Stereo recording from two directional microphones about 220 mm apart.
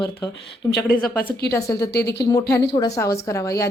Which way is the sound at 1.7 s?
45° left (ahead or behind).